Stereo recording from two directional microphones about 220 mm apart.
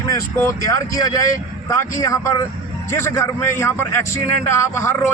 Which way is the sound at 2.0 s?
15° left (ahead or behind).